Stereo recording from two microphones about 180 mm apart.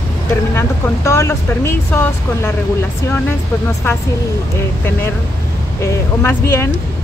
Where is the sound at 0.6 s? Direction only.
15° left (ahead or behind).